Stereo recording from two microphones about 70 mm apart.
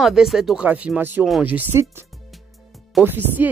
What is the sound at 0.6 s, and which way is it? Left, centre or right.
Speech, centre.